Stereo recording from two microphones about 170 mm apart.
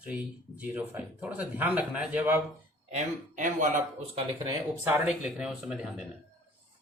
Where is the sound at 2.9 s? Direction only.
50° right (ahead or behind).